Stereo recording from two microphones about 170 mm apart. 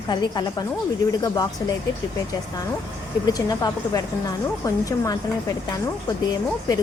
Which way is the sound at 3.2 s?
20° left (ahead or behind).